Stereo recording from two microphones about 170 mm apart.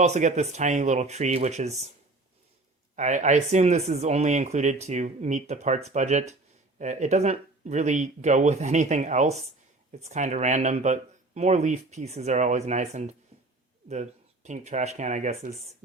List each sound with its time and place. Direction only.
0.0 s speech: 40° right (ahead or behind)
2.9 s speech: 45° right (ahead or behind)